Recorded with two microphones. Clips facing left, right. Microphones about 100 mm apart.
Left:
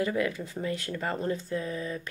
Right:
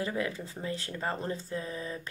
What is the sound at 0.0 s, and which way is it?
Speech, 25° right (ahead or behind).